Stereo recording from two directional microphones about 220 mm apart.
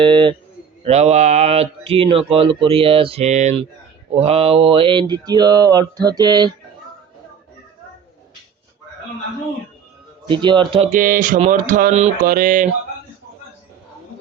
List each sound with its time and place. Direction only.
0.0 s speech: 20° right (ahead or behind)
10.2 s speech: 20° right (ahead or behind)
10.9 s mantra: 35° right (ahead or behind)